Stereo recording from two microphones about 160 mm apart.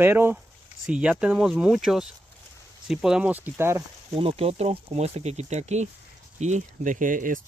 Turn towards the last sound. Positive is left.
turn(degrees=-55)  # may be behind; listen again after turning